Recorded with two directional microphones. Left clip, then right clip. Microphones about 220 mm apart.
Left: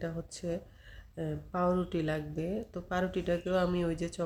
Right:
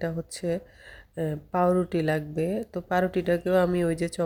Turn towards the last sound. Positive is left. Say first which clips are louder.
# right 7 dB
turn(degrees=-30)  # may be behind; listen again after turning